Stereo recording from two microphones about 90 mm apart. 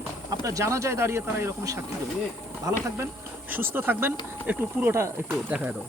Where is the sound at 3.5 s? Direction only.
25° right (ahead or behind).